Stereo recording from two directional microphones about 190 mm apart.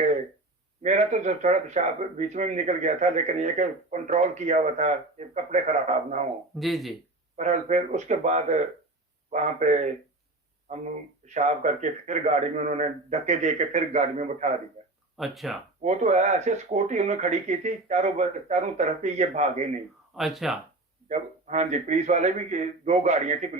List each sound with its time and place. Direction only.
0.8 s speech: 40° right (ahead or behind)
6.6 s speech: centre (ahead or behind)
7.3 s speech: 40° right (ahead or behind)
15.2 s speech: centre (ahead or behind)
15.8 s speech: 40° right (ahead or behind)
20.1 s speech: centre (ahead or behind)
21.1 s speech: 40° right (ahead or behind)